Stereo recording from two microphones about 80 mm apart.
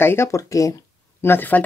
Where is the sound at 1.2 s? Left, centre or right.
Left.